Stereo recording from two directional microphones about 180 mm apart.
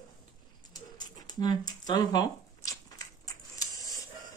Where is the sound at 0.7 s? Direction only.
20° left (ahead or behind).